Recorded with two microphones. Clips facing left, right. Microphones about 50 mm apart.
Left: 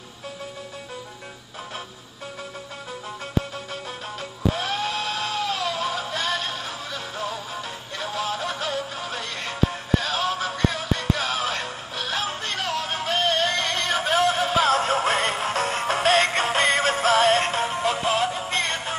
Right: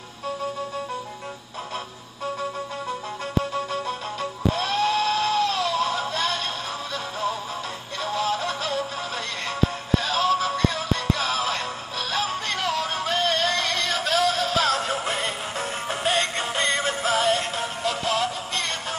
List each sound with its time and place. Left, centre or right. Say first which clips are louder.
4.6 s music: right 4 dB; centre
9.9 s music: right 3 dB; centre
14.7 s music: left 4 dB; left
17.0 s synthetic singing: left 4 dB; left
17.7 s music: even; left